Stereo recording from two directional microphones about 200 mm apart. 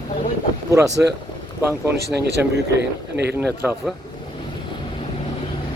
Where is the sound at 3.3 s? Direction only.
10° right (ahead or behind).